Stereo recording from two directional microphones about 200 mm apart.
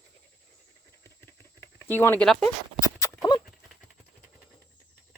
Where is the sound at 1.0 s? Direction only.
10° left (ahead or behind).